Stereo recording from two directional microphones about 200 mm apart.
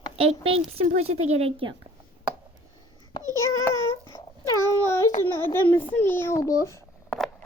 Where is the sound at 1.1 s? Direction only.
90° right.